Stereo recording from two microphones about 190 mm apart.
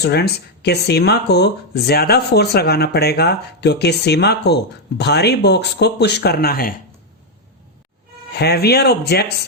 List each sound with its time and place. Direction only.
0.0 s speech: 60° left (ahead or behind)
8.4 s speech: 60° left (ahead or behind)